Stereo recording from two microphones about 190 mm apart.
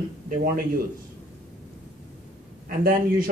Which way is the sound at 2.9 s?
50° right (ahead or behind).